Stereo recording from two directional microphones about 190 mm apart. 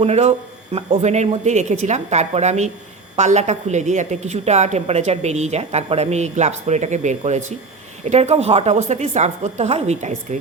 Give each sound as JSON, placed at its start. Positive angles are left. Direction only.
{"t": 0.0, "sound": "a woman's voice", "side_deg": -35}